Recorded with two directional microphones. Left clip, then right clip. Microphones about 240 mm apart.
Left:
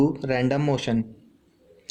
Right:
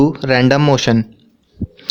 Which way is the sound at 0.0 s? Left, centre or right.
Right.